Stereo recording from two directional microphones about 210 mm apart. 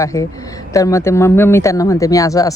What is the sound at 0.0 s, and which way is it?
Speech, 15° left (ahead or behind).